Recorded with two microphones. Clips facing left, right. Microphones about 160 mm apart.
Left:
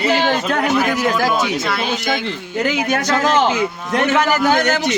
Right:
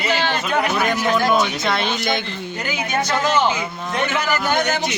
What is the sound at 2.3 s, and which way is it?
A man's voice, 85° left.